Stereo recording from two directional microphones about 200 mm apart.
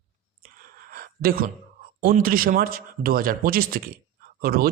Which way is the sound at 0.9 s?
45° right (ahead or behind).